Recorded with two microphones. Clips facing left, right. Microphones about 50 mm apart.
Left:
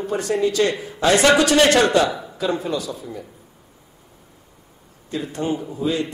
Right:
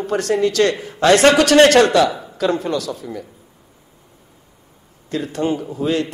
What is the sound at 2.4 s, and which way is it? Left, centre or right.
Speech, right.